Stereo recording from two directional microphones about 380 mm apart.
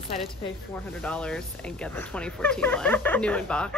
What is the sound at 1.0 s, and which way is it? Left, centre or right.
Speech, centre.